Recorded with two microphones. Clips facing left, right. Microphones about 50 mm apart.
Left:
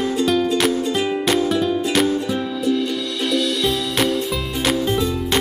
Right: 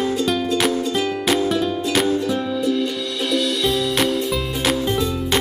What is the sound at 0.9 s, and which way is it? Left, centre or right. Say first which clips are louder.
Music: left 1 dB; centre.